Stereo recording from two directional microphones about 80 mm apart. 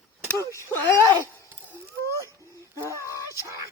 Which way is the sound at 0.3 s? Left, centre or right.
Left.